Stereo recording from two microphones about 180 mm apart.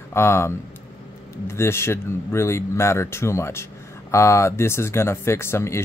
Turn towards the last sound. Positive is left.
turn(degrees=15)  # may be behind; listen again after turning